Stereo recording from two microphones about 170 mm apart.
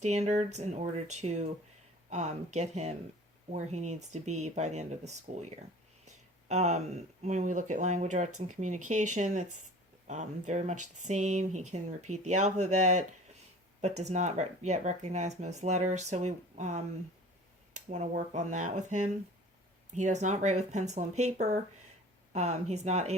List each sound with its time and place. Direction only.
0.0 s speech: 40° right (ahead or behind)